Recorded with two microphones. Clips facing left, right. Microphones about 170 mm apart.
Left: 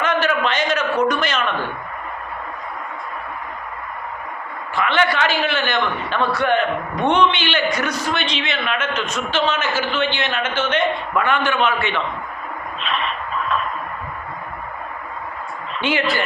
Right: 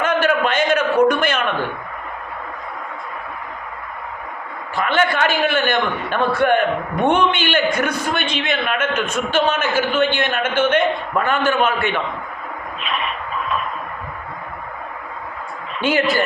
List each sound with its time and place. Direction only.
0.0 s a sound: 50° right (ahead or behind)
4.7 s a man's voice: 45° right (ahead or behind)
11.1 s a man's voice: 40° right (ahead or behind)
15.8 s a man's voice: 45° right (ahead or behind)